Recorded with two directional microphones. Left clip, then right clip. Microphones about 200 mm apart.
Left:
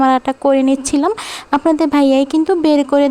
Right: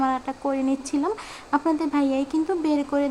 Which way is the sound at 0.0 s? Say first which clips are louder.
Left 12 dB; 40° left (ahead or behind).